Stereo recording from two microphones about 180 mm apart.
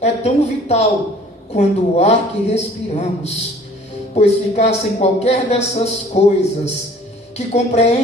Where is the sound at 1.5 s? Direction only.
35° left (ahead or behind).